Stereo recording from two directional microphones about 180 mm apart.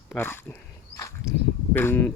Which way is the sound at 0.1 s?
10° left (ahead or behind).